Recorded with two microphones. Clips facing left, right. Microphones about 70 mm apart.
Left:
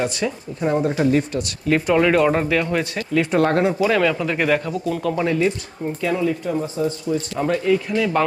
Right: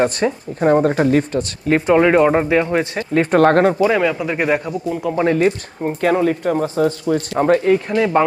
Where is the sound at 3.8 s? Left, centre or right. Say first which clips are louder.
Right 2 dB; centre.